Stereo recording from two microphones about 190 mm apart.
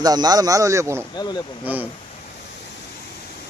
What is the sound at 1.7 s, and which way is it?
Speech, 10° right (ahead or behind).